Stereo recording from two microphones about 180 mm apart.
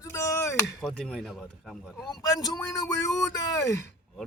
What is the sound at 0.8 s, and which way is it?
Speech, centre (ahead or behind).